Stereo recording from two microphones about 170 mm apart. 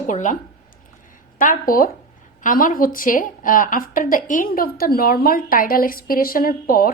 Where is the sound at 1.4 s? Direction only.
55° left (ahead or behind).